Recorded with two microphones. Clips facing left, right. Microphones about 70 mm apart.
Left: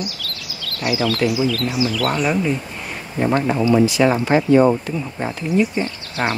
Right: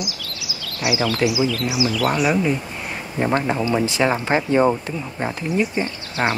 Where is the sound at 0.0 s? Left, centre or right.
Centre.